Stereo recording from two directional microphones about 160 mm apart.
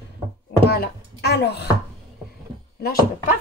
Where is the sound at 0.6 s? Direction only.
90° left.